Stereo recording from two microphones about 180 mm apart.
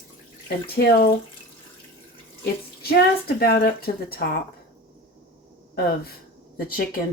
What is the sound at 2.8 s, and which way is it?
Speech, 55° left (ahead or behind).